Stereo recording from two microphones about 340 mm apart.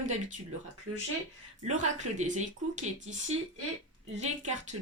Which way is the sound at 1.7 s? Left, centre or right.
Right.